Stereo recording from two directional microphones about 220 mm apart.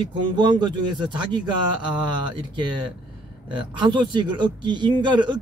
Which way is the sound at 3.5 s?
20° right (ahead or behind).